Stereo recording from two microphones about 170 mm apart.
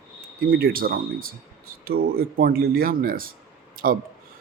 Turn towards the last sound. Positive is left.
turn(degrees=-60)  # may be behind; listen again after turning